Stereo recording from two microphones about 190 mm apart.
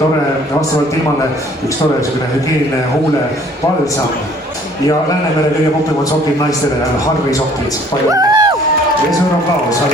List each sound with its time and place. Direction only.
8.1 s music: 20° right (ahead or behind)